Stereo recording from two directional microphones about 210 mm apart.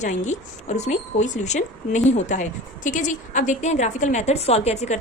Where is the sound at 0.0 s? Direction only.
35° left (ahead or behind).